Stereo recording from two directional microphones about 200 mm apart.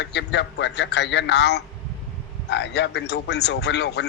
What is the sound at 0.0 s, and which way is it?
A man's voice, 60° left (ahead or behind).